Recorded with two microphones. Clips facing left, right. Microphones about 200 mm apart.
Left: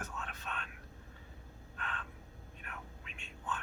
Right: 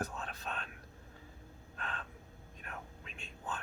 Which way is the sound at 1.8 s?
35° right (ahead or behind).